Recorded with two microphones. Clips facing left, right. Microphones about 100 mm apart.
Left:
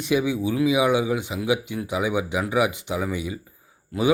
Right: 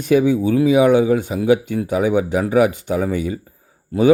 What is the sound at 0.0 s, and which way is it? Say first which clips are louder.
Speech: right 7 dB; 45° right (ahead or behind).